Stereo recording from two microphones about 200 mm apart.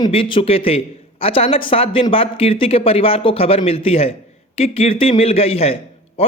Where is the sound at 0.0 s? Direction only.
25° left (ahead or behind).